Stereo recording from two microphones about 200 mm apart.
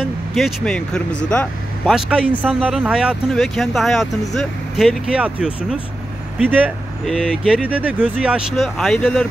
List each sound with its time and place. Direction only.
0.0 s speech: centre (ahead or behind)